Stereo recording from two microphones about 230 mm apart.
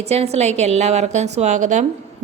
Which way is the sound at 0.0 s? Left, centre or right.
Right.